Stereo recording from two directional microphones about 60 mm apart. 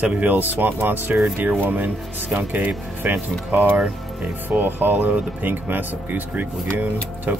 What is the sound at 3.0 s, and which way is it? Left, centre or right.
Speech, right.